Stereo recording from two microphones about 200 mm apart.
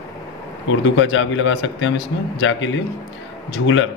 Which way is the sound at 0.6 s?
70° left (ahead or behind).